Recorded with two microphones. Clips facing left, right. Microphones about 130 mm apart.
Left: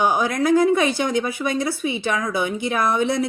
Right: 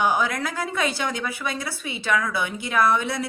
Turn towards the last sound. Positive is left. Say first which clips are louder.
# left 2 dB
turn(degrees=20)  # may be behind; listen again after turning